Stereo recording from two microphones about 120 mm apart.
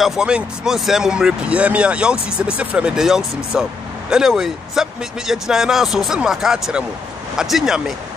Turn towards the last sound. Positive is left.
turn(degrees=0)  # may be behind; listen again after turning